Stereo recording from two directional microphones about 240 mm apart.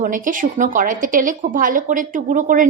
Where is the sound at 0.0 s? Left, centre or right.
Right.